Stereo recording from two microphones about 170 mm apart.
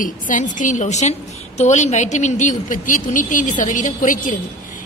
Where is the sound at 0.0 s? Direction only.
50° left (ahead or behind).